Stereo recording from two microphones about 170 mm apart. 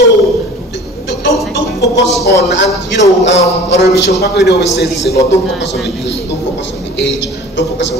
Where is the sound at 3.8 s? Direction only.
75° left (ahead or behind).